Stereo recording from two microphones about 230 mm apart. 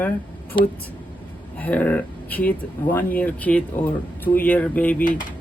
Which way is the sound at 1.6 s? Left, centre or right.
Centre.